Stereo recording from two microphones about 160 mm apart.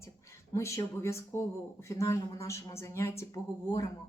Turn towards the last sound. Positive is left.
turn(degrees=20)  # may be behind; listen again after turning